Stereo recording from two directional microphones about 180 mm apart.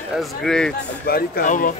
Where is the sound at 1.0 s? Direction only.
55° left (ahead or behind).